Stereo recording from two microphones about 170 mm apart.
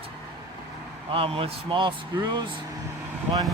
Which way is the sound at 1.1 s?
35° right (ahead or behind).